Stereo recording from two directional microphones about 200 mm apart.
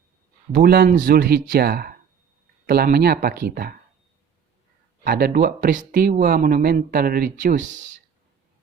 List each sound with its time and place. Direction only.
0.5 s speech: 50° right (ahead or behind)
5.0 s speech: 45° right (ahead or behind)